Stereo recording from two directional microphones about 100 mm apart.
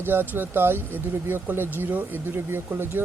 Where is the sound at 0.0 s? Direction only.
20° right (ahead or behind).